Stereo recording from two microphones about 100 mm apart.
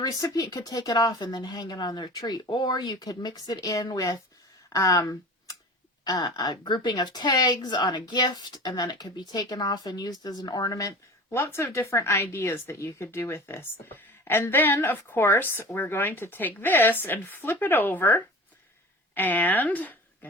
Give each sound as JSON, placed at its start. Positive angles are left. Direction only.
{"t": 0.0, "sound": "a woman's voice", "side_deg": 40}
{"t": 6.1, "sound": "a woman's voice", "side_deg": 45}